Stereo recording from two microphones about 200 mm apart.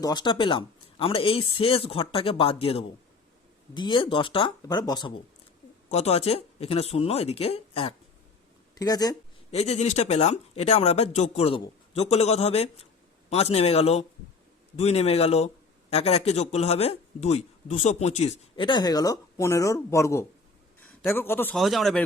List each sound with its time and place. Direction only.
0.0 s speech: 20° left (ahead or behind)
5.9 s speech: 35° left (ahead or behind)
8.8 s speech: 20° left (ahead or behind)
9.5 s a man's voice: 35° left (ahead or behind); by 21.6 s 10° left (ahead or behind)
21.6 s speech: centre (ahead or behind)